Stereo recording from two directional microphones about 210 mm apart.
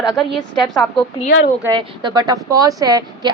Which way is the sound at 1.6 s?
20° right (ahead or behind).